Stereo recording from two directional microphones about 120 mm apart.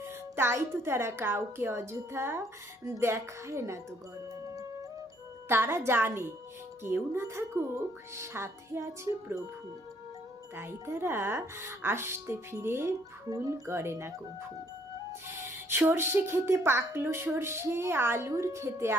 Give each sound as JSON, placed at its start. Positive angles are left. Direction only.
{"t": 0.0, "sound": "a woman's voice", "side_deg": -20}
{"t": 4.4, "sound": "music", "side_deg": -30}
{"t": 5.5, "sound": "a woman's voice", "side_deg": -20}
{"t": 10.5, "sound": "a woman's voice", "side_deg": -20}
{"t": 15.5, "sound": "a woman's voice", "side_deg": -20}